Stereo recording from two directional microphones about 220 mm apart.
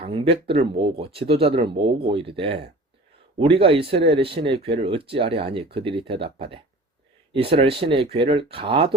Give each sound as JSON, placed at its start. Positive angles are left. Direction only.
{"t": 0.0, "sound": "speech", "side_deg": -25}